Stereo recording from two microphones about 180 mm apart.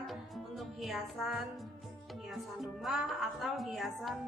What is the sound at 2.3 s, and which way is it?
Speech, centre (ahead or behind).